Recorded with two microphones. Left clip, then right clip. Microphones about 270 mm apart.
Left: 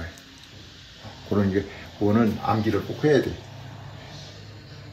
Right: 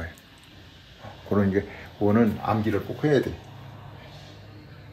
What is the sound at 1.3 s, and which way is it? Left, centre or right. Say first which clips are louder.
Speech: even; centre.